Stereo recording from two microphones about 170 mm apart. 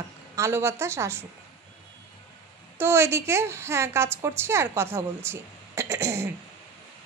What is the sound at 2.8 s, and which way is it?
A woman's voice, 15° right (ahead or behind).